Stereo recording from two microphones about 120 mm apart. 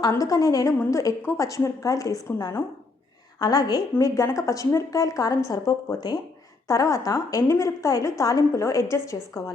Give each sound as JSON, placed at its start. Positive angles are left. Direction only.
{"t": 0.1, "sound": "a woman's voice", "side_deg": 30}